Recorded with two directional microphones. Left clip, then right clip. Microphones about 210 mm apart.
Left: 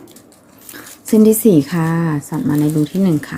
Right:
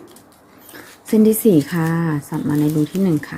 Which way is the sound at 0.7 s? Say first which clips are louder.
Left 3 dB; centre (ahead or behind).